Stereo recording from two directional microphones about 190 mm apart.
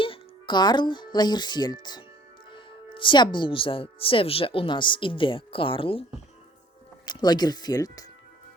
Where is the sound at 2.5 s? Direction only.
25° left (ahead or behind).